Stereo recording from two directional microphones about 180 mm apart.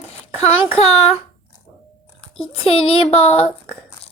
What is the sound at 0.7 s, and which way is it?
Speech, 35° left (ahead or behind).